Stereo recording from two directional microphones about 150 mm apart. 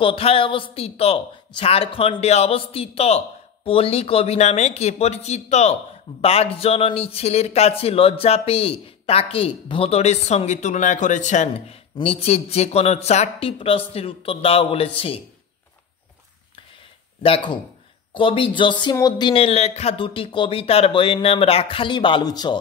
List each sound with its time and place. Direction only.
0.0 s a man's voice: 40° left (ahead or behind)
17.2 s a man's voice: 35° left (ahead or behind)